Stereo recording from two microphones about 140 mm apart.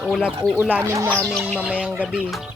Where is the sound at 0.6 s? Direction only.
15° right (ahead or behind).